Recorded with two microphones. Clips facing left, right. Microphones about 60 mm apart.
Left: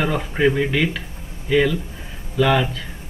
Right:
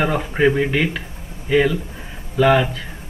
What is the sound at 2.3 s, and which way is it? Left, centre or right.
Speech, right.